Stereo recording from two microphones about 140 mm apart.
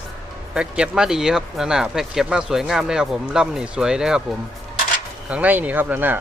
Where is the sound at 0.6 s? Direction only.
5° right (ahead or behind).